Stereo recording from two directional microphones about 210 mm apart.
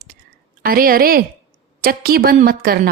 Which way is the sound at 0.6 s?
45° right (ahead or behind).